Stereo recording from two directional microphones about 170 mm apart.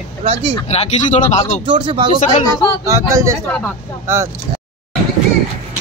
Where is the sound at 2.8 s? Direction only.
15° right (ahead or behind).